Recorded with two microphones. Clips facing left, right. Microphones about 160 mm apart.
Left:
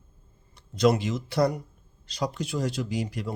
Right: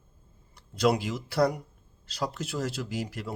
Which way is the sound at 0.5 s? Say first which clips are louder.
Left 3 dB; 10° right (ahead or behind).